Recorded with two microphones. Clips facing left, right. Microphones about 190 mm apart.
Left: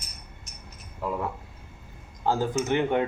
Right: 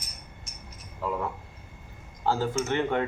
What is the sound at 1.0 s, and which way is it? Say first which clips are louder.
Speech: even; 10° left (ahead or behind).